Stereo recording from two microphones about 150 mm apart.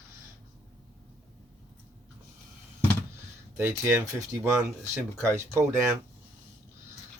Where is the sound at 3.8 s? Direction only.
15° right (ahead or behind).